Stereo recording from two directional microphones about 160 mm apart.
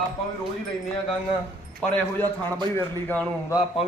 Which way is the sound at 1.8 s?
10° left (ahead or behind).